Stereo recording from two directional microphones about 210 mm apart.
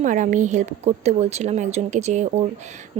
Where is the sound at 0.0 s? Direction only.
35° right (ahead or behind).